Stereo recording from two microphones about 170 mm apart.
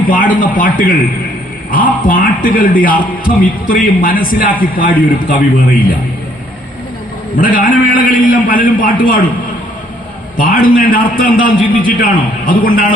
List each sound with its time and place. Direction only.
0.1 s a man's voice: 50° left (ahead or behind)
7.3 s a man's voice: 55° left (ahead or behind)
10.3 s a man's voice: 55° left (ahead or behind)